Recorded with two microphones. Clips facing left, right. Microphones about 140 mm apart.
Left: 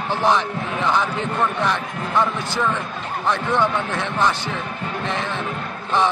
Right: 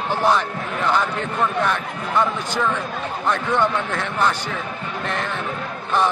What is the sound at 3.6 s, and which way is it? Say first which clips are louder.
Speech: even; 10° left (ahead or behind).